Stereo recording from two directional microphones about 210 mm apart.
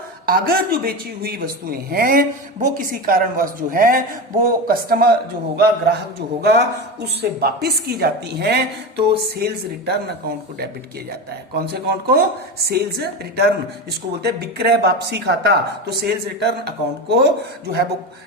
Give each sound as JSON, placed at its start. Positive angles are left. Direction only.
{"t": 0.3, "sound": "a man's voice", "side_deg": -45}